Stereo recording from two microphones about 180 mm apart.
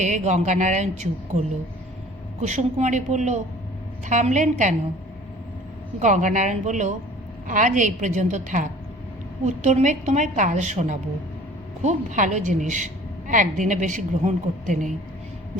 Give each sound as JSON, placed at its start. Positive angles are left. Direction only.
{"t": 0.0, "sound": "a woman's voice", "side_deg": -40}
{"t": 6.0, "sound": "a woman's voice", "side_deg": -45}